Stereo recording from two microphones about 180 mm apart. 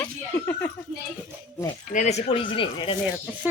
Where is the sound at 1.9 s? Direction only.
40° left (ahead or behind).